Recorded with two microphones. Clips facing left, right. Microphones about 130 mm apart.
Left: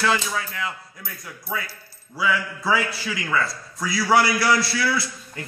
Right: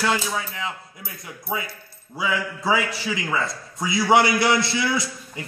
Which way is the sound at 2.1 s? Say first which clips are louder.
Left 1 dB; 15° right (ahead or behind).